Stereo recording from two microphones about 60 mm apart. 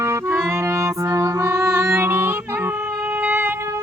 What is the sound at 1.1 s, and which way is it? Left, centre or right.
Music, right.